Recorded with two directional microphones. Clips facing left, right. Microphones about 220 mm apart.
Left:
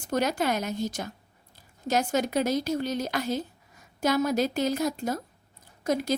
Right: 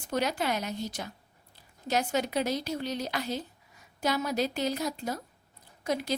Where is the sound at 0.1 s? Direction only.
45° left (ahead or behind).